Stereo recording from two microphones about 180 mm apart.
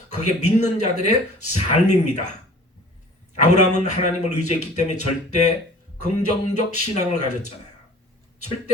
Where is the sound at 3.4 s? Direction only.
40° left (ahead or behind).